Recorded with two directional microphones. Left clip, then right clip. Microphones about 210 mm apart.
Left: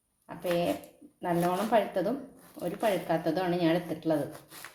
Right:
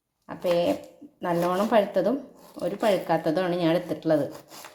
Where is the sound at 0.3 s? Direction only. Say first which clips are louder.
Right 6 dB; 20° right (ahead or behind).